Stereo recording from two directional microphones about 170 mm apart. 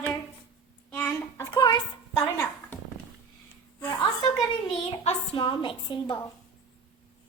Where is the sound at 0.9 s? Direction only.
10° left (ahead or behind).